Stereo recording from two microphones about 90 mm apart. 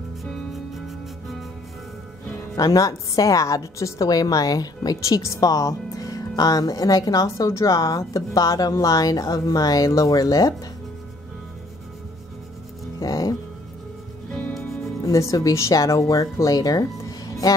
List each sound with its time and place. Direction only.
0.2 s music: centre (ahead or behind)
2.5 s a woman's voice: 40° left (ahead or behind)
13.0 s music: 40° left (ahead or behind)
15.0 s speech: 35° left (ahead or behind)